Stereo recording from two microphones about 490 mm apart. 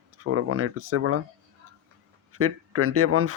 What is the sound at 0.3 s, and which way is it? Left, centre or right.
Speech, right.